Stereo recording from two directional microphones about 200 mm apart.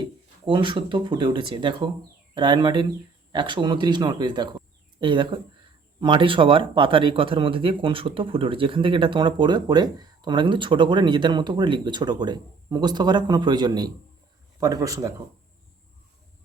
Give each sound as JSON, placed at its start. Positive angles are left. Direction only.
{"t": 0.0, "sound": "speech", "side_deg": -25}